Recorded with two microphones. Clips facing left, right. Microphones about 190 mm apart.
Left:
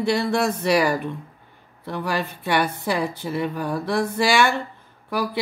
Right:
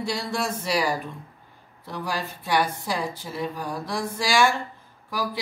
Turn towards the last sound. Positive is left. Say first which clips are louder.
# left 4 dB
turn(degrees=60)  # may be behind; listen again after turning